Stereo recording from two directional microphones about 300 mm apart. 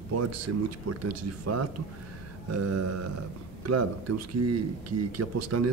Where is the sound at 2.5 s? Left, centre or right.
Right.